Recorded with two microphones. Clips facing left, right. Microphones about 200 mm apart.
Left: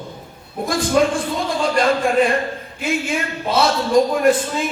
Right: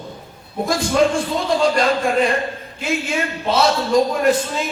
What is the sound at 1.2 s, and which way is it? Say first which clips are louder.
A man's voice: right 3 dB; 50° left (ahead or behind).